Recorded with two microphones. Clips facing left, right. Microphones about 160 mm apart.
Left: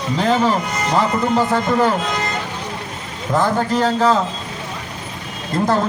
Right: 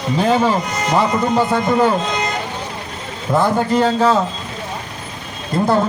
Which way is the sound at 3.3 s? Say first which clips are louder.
Right 2 dB; 15° right (ahead or behind).